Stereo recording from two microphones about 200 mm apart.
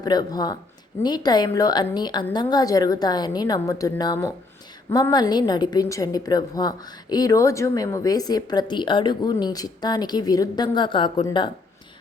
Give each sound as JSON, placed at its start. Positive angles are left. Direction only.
{"t": 0.0, "sound": "a woman's voice", "side_deg": 20}